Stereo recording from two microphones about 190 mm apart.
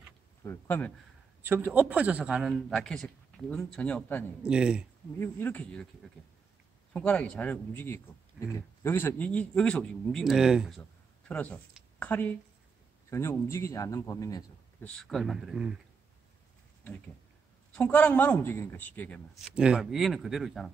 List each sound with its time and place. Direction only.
0.4 s a man's voice: 10° left (ahead or behind)
1.4 s a man's voice: 10° right (ahead or behind); by 4.5 s 10° left (ahead or behind)
4.5 s a man's voice: 5° right (ahead or behind)
5.2 s a man's voice: 10° left (ahead or behind)
6.9 s a man's voice: 5° left (ahead or behind)
14.9 s a man's voice: centre (ahead or behind)
17.7 s a man's voice: 5° left (ahead or behind)